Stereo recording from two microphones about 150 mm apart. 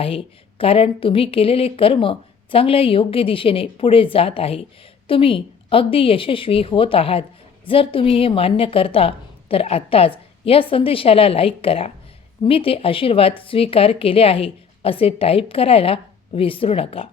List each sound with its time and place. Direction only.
0.0 s a woman's voice: 40° left (ahead or behind)